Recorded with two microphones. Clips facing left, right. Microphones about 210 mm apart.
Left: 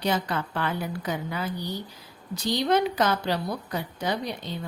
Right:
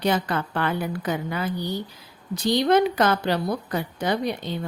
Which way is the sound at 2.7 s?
55° right (ahead or behind).